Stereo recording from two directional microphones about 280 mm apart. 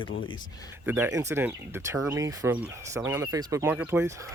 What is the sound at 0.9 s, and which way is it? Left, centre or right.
Speech, centre.